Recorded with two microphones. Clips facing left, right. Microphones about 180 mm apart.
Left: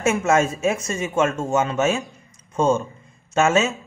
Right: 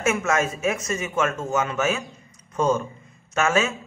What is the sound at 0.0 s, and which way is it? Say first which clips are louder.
Speech: left 4 dB; 30° left (ahead or behind).